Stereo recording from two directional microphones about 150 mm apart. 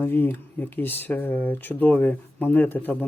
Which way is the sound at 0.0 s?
15° left (ahead or behind).